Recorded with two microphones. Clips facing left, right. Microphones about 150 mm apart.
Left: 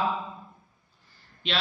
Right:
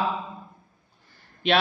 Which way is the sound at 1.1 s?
60° right (ahead or behind).